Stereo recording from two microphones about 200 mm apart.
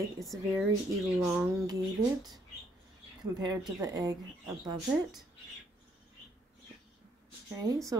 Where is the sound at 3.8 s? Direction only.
15° right (ahead or behind).